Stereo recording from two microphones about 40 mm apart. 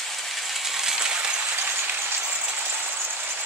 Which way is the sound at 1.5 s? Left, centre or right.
Right.